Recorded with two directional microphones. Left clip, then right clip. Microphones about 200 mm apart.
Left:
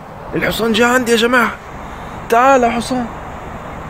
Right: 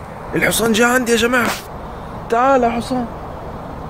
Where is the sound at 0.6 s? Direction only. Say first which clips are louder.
Left 4 dB; 15° left (ahead or behind).